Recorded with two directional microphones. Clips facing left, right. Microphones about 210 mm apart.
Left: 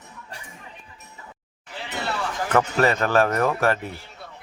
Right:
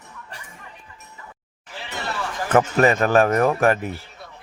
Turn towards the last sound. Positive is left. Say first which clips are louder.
# right 4 dB
turn(degrees=-15)  # may be behind; listen again after turning